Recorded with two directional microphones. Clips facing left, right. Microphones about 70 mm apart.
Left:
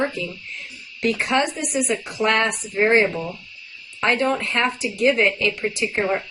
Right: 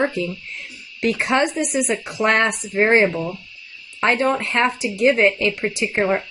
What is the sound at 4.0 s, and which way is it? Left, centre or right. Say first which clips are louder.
A woman's voice: right 2 dB; centre.